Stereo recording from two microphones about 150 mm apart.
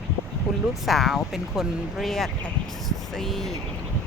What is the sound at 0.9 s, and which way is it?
Speech, centre (ahead or behind).